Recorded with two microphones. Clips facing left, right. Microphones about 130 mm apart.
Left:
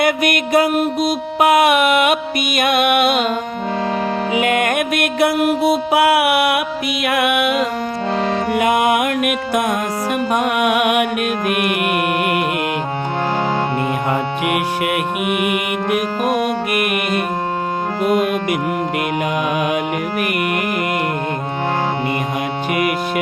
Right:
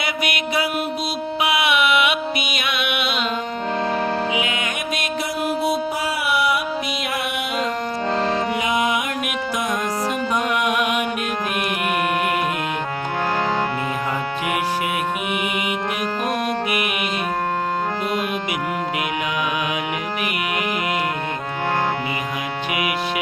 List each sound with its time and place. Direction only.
0.0 s music: 50° left (ahead or behind)
4.4 s music: 55° left (ahead or behind)
14.1 s music: 60° left (ahead or behind)
15.9 s music: 10° left (ahead or behind)
18.0 s music: 50° left (ahead or behind)
22.7 s music: 45° left (ahead or behind)